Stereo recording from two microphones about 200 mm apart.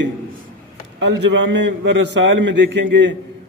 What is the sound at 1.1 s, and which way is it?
A man's voice, 60° right (ahead or behind).